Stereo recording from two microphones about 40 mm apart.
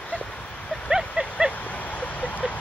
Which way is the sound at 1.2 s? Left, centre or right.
Right.